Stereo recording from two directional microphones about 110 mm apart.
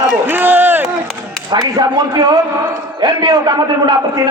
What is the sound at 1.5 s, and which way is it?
A man's voice, 35° right (ahead or behind).